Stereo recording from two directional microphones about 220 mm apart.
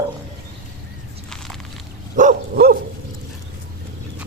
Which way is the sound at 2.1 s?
40° right (ahead or behind).